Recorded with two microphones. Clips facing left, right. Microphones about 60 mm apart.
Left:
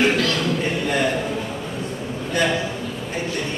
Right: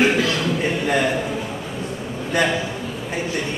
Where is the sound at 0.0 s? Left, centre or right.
Centre.